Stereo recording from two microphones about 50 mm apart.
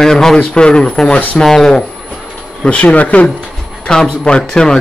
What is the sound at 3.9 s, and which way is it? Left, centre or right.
Speech, centre.